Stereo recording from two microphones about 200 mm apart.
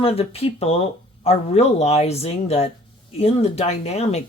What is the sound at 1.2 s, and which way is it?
Speech, 30° left (ahead or behind).